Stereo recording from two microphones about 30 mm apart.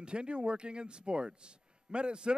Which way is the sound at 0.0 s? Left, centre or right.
Right.